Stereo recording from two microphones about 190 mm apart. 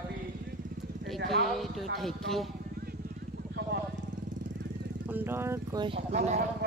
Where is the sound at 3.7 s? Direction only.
60° right (ahead or behind).